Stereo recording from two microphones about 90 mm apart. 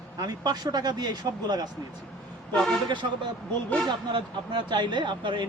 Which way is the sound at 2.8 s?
60° right (ahead or behind).